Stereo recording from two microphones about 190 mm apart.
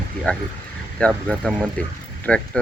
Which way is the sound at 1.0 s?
5° left (ahead or behind).